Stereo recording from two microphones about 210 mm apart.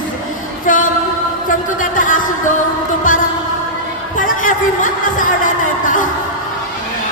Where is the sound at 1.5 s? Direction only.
40° left (ahead or behind).